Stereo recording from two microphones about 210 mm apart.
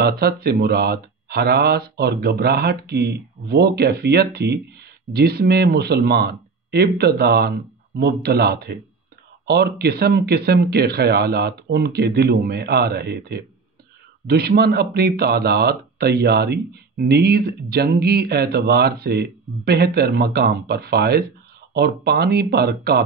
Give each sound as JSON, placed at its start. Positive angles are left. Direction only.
{"t": 0.0, "sound": "speech", "side_deg": -45}